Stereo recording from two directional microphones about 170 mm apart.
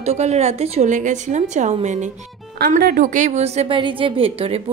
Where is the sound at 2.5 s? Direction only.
60° right (ahead or behind); by 4.6 s 35° right (ahead or behind).